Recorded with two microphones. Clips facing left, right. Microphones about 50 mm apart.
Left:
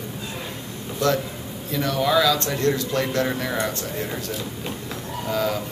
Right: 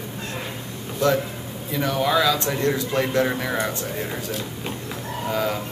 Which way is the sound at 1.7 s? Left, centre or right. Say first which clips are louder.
Even; centre.